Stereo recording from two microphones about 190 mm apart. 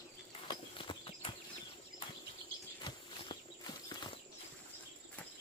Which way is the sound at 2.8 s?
25° left (ahead or behind).